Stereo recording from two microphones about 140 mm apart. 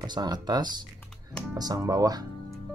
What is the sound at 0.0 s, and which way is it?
Speech, 30° right (ahead or behind).